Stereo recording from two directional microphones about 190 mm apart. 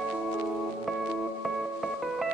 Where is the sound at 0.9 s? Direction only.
Centre (ahead or behind).